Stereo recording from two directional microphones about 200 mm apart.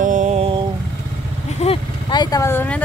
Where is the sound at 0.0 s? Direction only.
40° right (ahead or behind).